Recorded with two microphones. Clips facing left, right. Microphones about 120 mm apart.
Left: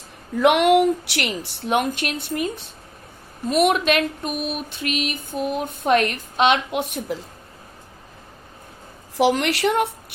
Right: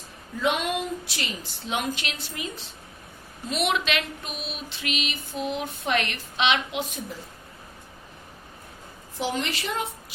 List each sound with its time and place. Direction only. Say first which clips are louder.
0.3 s a woman's voice: left 11 dB; 75° left (ahead or behind); by 2.6 s 55° left (ahead or behind)
3.5 s a sound: left 8 dB; 50° left (ahead or behind); by 7.2 s 65° left (ahead or behind)
9.1 s a woman's voice: left 10 dB; 85° left; by 10.2 s 70° left (ahead or behind)